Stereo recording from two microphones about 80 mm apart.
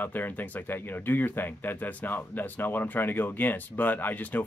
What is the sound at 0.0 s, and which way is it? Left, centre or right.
Speech, left.